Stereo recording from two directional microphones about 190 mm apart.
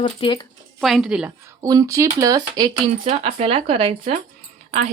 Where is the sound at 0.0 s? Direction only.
25° left (ahead or behind).